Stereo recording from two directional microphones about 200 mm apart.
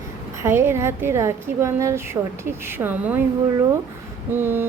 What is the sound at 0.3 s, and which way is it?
A woman's voice, 10° right (ahead or behind).